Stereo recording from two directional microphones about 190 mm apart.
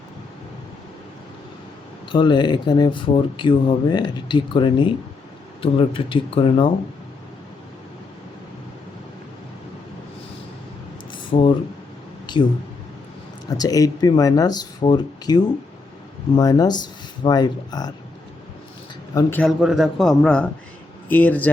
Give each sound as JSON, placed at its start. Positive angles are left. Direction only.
{"t": 2.1, "sound": "speech", "side_deg": 25}
{"t": 11.1, "sound": "a sound", "side_deg": 25}
{"t": 13.5, "sound": "speech", "side_deg": 20}
{"t": 19.1, "sound": "a man's voice", "side_deg": 10}